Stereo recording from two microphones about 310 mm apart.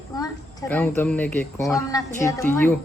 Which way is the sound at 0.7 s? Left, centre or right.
Centre.